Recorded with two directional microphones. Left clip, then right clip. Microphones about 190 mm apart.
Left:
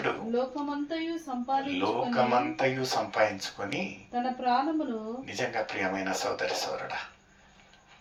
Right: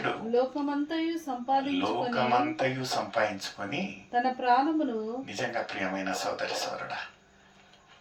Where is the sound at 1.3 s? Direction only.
35° right (ahead or behind).